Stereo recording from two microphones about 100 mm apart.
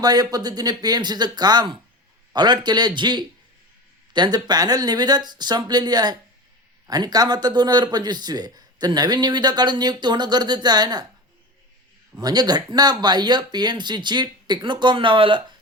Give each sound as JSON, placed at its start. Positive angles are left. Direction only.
{"t": 0.0, "sound": "speech", "side_deg": -40}
{"t": 12.2, "sound": "speech", "side_deg": -40}